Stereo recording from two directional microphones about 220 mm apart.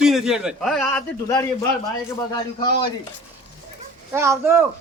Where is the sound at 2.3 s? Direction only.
20° left (ahead or behind).